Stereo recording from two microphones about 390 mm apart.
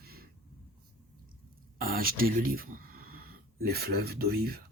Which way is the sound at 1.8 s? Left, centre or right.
Right.